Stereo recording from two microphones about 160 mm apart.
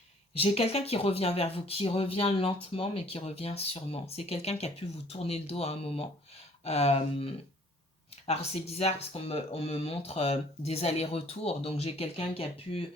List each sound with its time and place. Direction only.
0.3 s speech: 40° left (ahead or behind)